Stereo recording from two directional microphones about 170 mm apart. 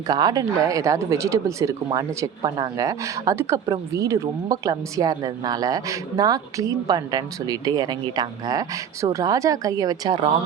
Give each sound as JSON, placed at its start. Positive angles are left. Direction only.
{"t": 0.1, "sound": "speech", "side_deg": -25}